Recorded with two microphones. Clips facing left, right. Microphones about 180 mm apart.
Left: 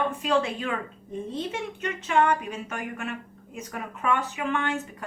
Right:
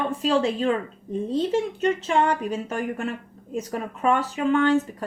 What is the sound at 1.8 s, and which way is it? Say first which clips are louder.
Speech: left 1 dB; 30° right (ahead or behind).